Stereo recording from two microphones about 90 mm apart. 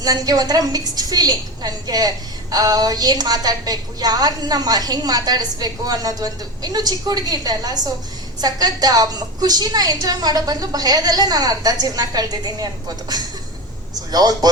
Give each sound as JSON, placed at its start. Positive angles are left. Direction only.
{"t": 0.0, "sound": "a woman's voice", "side_deg": -45}
{"t": 14.1, "sound": "a woman's voice", "side_deg": -45}